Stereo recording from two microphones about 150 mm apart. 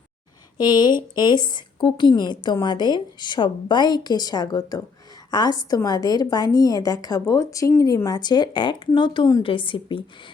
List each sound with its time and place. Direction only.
0.5 s a woman's voice: 30° left (ahead or behind)